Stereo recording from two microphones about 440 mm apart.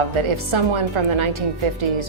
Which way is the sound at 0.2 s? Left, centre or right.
Right.